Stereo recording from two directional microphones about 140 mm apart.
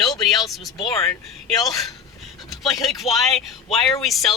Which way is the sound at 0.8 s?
25° left (ahead or behind).